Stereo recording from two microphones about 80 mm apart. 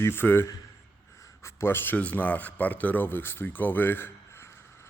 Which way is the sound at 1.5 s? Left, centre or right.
Left.